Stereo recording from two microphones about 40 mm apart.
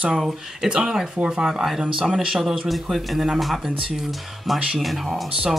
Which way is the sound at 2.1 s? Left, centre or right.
Centre.